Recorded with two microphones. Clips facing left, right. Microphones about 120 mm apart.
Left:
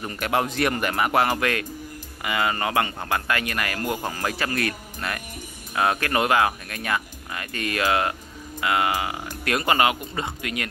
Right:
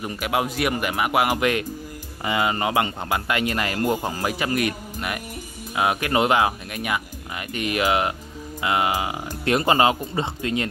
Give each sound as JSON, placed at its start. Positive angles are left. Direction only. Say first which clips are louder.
{"t": 0.0, "sound": "speech", "louder": "even", "side_deg": -10}